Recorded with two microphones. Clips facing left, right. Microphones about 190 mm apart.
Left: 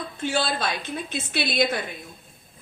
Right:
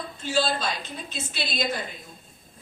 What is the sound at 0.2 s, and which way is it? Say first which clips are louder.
Speech: even; 60° left (ahead or behind).